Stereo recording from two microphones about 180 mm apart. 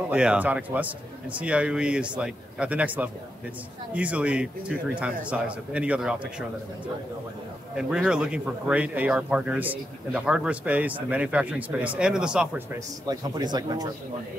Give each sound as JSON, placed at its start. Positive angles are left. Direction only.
{"t": 0.1, "sound": "speech", "side_deg": -5}
{"t": 7.7, "sound": "speech", "side_deg": -5}
{"t": 12.7, "sound": "speech", "side_deg": -20}